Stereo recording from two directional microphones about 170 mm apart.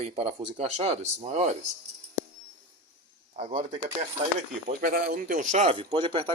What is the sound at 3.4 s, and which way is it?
Speech, 35° right (ahead or behind).